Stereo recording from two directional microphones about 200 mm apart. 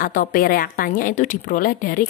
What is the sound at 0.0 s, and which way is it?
Speech, 45° left (ahead or behind).